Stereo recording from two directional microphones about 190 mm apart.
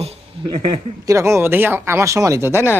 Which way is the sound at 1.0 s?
15° right (ahead or behind).